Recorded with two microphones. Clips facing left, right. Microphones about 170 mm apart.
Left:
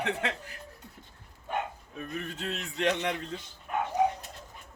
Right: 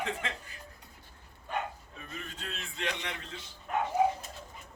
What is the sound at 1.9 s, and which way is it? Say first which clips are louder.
Speech: left 7 dB; 60° left (ahead or behind).